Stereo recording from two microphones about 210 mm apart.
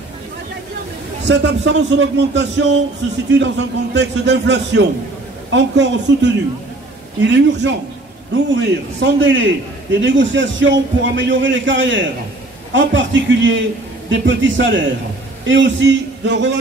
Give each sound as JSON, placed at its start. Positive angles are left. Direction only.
{"t": 1.2, "sound": "a man's voice", "side_deg": -55}